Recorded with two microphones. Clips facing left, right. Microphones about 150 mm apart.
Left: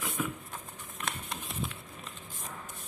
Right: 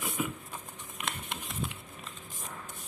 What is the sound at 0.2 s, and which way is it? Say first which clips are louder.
Patter: right 1 dB; 5° right (ahead or behind).